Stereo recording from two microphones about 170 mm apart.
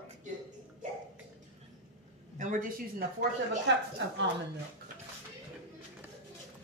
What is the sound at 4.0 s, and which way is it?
Speech, 90° right.